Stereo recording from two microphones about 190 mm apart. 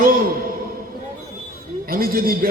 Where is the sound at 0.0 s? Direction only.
50° right (ahead or behind).